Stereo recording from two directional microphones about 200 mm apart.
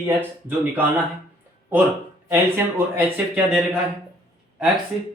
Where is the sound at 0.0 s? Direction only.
10° right (ahead or behind).